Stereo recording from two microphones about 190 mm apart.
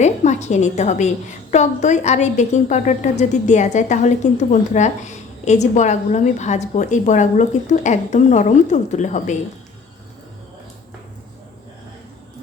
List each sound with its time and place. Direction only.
0.0 s a woman's voice: 35° left (ahead or behind)